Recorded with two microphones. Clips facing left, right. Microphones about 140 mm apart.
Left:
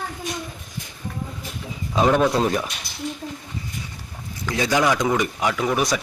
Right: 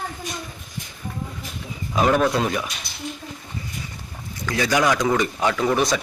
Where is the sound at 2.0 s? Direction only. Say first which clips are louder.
Left 1 dB; centre (ahead or behind).